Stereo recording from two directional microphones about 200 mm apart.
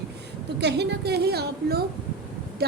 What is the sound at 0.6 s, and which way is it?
A woman's voice, 55° right (ahead or behind).